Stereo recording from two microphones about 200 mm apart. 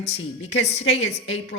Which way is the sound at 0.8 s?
60° left (ahead or behind).